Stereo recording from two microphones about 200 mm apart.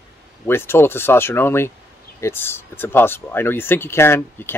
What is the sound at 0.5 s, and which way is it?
Speech, 10° left (ahead or behind).